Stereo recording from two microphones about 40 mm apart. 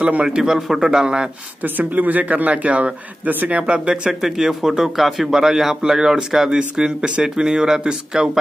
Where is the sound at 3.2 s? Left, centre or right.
Right.